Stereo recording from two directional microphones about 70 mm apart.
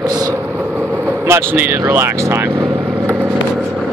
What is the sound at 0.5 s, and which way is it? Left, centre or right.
Vehicle, right.